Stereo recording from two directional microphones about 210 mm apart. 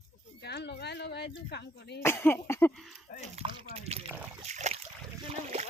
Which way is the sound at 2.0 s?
10° left (ahead or behind).